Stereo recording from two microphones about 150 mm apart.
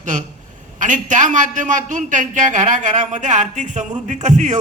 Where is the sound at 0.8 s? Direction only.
55° right (ahead or behind).